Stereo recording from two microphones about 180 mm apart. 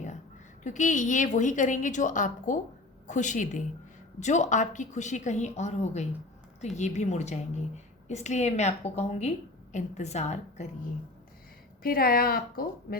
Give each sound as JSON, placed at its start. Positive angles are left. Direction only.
{"t": 0.6, "sound": "a woman's voice", "side_deg": 40}
{"t": 11.8, "sound": "speech", "side_deg": 55}